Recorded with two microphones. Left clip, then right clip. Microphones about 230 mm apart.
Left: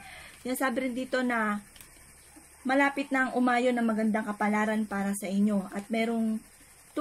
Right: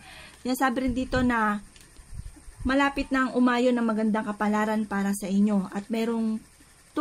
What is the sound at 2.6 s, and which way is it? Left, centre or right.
Speech, right.